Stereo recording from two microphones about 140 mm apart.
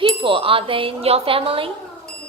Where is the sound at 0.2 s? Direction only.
40° right (ahead or behind).